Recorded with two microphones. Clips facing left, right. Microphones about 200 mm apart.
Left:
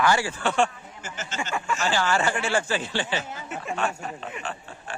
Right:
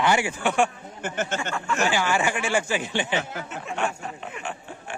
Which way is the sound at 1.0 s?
55° right (ahead or behind).